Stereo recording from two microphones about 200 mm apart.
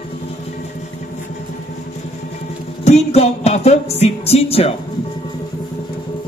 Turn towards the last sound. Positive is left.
turn(degrees=30)  # may be behind; listen again after turning